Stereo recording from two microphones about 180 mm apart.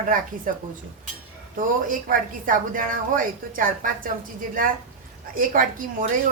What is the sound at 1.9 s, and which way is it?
A woman's voice, 50° right (ahead or behind).